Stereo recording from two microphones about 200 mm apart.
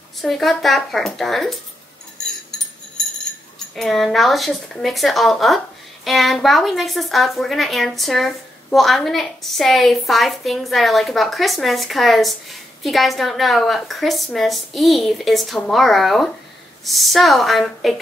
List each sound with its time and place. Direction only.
0.2 s a woman's voice: centre (ahead or behind)
3.7 s a woman's voice: centre (ahead or behind)